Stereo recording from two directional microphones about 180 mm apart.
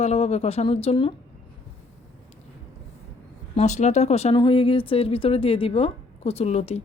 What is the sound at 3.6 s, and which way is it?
Speech, 40° left (ahead or behind).